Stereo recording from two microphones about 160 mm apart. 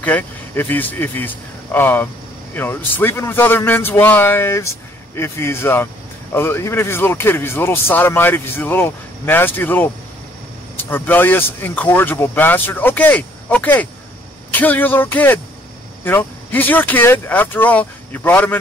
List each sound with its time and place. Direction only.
0.0 s speech: 10° left (ahead or behind)